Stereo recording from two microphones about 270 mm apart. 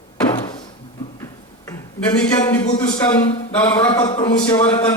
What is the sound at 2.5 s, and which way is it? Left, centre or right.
A man's voice, centre.